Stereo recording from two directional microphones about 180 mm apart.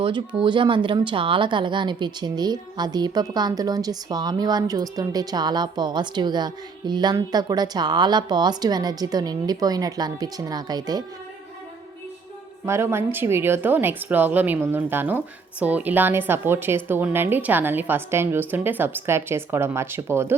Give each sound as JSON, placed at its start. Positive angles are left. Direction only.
{"t": 0.4, "sound": "speech", "side_deg": -25}
{"t": 12.6, "sound": "a woman's voice", "side_deg": -15}